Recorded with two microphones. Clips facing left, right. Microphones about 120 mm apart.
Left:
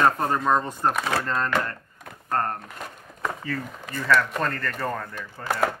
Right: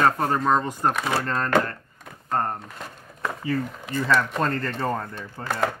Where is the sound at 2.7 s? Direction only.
5° left (ahead or behind).